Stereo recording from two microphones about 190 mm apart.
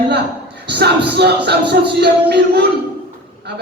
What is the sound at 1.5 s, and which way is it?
Speech, 60° right (ahead or behind).